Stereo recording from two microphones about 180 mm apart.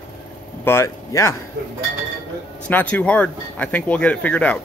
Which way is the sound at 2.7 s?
10° left (ahead or behind).